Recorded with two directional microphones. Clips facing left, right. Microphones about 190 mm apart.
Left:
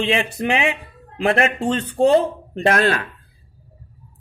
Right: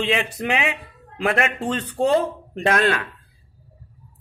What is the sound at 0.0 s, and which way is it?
Speech, 30° left (ahead or behind).